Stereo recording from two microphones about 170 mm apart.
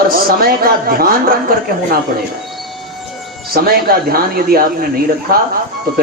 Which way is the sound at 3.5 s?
60° right (ahead or behind).